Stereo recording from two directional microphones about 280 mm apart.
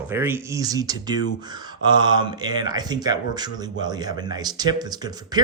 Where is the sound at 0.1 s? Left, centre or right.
Centre.